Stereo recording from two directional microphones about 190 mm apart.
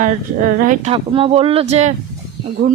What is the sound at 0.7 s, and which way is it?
Speech, 35° right (ahead or behind).